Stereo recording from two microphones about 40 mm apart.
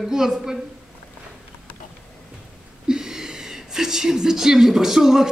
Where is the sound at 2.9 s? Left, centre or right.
Centre.